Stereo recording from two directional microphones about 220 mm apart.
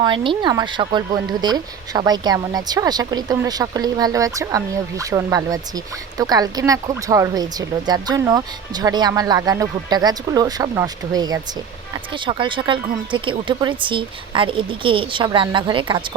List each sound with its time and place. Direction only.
0.0 s speech: 20° right (ahead or behind)